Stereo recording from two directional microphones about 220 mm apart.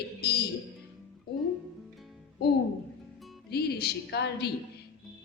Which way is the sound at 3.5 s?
45° left (ahead or behind).